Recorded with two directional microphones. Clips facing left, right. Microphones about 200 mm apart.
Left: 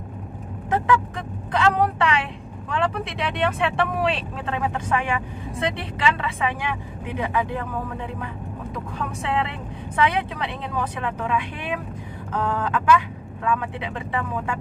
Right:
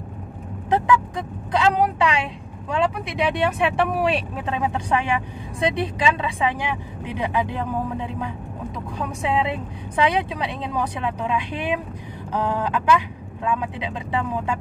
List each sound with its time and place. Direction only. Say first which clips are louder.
0.7 s speech: right 2 dB; 15° right (ahead or behind)
8.9 s speech: right 3 dB; 15° right (ahead or behind)